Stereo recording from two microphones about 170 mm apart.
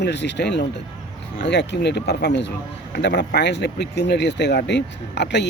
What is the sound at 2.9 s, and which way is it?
Speech, 70° left (ahead or behind).